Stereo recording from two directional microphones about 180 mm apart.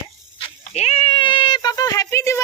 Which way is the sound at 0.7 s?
35° left (ahead or behind).